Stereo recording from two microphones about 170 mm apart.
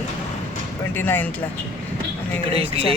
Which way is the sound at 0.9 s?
10° left (ahead or behind).